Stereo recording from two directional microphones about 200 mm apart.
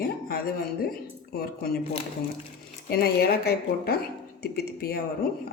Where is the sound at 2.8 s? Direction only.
50° left (ahead or behind).